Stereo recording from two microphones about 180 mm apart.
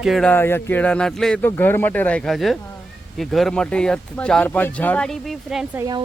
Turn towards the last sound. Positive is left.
turn(degrees=-20)  # may be behind; listen again after turning